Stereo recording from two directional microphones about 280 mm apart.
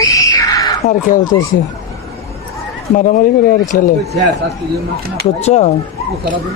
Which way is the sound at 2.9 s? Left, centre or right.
Left.